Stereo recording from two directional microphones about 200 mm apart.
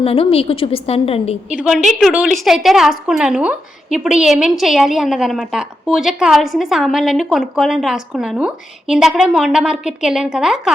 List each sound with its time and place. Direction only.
0.0 s a woman's voice: 30° left (ahead or behind)
1.5 s a woman's voice: 5° right (ahead or behind)